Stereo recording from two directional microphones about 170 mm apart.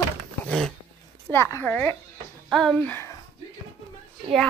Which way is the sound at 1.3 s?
15° left (ahead or behind).